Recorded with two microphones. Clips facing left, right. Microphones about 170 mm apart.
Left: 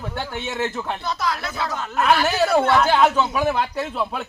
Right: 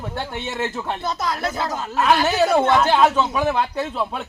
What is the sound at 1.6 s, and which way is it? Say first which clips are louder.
Speech: right 1 dB; 35° right (ahead or behind).